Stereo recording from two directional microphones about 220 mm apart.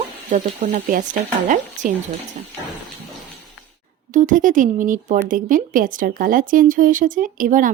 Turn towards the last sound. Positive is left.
turn(degrees=-35)  # may be behind; listen again after turning